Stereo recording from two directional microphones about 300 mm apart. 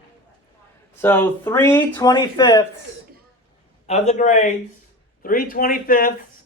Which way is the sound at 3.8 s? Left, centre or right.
Left.